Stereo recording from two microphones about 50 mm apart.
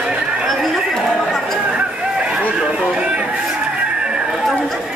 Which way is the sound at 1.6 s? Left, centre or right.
Right.